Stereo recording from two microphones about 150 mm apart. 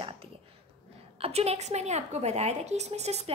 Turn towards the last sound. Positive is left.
turn(degrees=-45)  # may be behind; listen again after turning